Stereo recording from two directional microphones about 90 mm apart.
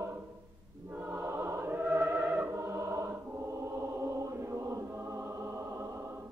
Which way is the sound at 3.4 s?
35° right (ahead or behind).